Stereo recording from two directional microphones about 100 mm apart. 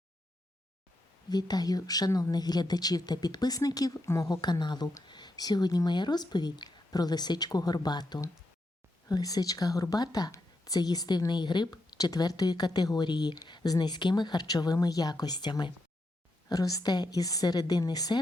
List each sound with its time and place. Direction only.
1.3 s a woman's voice: 45° left (ahead or behind)